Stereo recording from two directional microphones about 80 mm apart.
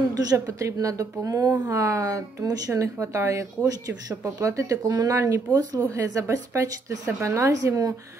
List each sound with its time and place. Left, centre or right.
0.1 s speech: right